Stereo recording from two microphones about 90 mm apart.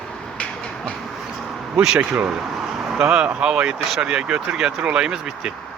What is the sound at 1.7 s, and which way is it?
Speech, 10° right (ahead or behind).